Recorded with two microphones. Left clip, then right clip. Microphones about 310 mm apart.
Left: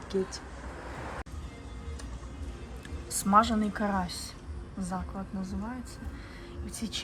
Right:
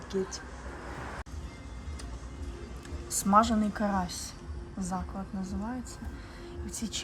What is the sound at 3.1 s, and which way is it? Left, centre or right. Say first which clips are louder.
Speech: even; centre.